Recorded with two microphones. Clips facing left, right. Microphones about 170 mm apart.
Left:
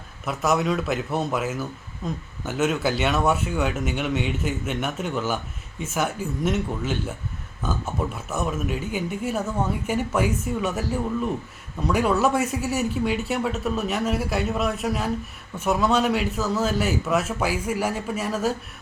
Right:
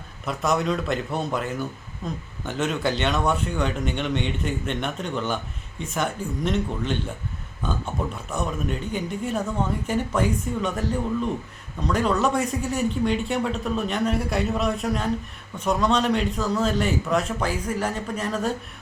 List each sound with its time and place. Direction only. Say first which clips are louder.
0.3 s speech: left 1 dB; 5° left (ahead or behind)